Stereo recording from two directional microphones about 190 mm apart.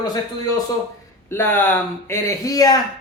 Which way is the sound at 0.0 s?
20° left (ahead or behind).